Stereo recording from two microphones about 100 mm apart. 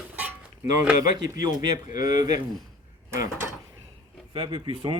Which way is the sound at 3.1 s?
25° right (ahead or behind).